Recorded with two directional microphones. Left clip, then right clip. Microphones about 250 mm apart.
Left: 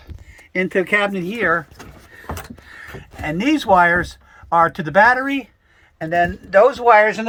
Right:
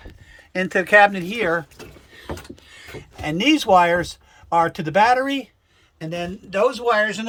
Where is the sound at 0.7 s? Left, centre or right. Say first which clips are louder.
Right 5 dB; right.